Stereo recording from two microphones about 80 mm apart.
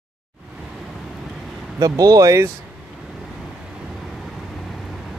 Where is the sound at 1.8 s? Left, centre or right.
Right.